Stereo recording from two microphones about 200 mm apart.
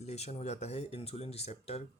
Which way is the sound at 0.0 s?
35° left (ahead or behind).